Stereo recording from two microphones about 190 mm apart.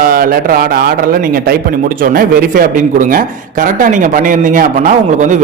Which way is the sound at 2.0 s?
50° right (ahead or behind).